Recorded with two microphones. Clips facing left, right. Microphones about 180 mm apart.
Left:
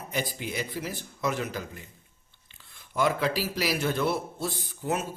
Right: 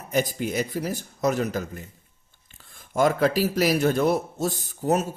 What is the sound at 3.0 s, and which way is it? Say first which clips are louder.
Speech: right 6 dB; 45° right (ahead or behind).